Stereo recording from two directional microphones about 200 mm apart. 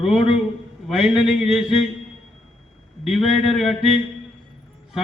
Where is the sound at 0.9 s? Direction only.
5° right (ahead or behind).